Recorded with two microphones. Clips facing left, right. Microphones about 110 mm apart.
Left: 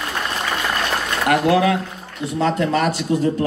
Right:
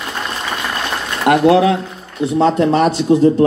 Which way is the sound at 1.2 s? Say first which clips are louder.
Right 6 dB; 25° right (ahead or behind).